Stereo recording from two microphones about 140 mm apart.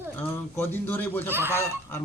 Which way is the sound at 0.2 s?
15° left (ahead or behind).